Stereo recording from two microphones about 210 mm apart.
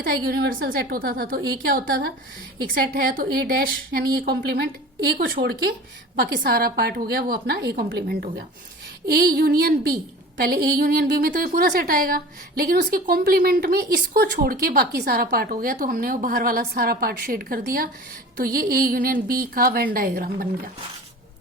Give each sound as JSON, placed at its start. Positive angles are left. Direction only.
{"t": 0.0, "sound": "a woman's voice", "side_deg": -45}